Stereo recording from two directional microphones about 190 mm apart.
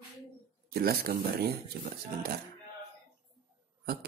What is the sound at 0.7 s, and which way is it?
Speech, 55° right (ahead or behind).